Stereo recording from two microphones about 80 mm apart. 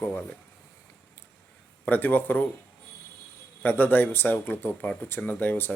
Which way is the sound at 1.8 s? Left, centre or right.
Left.